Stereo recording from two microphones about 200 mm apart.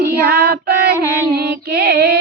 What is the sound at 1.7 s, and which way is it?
Female singing, 55° right (ahead or behind).